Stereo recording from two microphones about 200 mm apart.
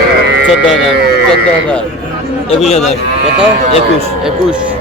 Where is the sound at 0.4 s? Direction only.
Centre (ahead or behind).